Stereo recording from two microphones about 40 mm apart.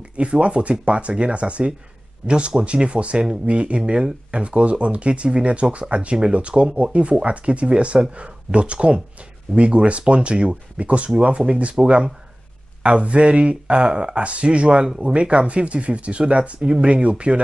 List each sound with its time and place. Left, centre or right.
0.2 s speech: right